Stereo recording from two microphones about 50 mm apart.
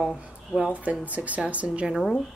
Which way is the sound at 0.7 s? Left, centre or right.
Right.